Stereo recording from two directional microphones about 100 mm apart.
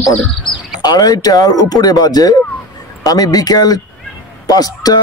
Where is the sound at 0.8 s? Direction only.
40° left (ahead or behind).